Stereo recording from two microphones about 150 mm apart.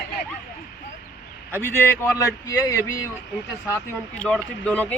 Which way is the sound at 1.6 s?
15° left (ahead or behind).